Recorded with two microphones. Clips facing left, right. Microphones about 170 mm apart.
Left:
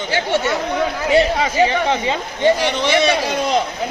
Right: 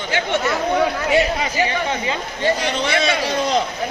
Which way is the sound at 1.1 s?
30° left (ahead or behind).